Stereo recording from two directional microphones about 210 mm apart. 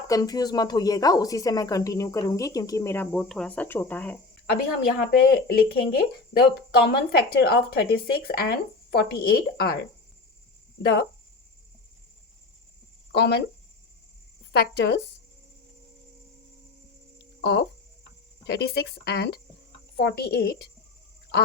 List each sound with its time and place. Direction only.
0.1 s a woman's voice: 15° left (ahead or behind)
4.9 s speech: 50° left (ahead or behind)
13.1 s speech: 55° left (ahead or behind)
14.5 s speech: 50° left (ahead or behind)
17.4 s speech: 55° left (ahead or behind)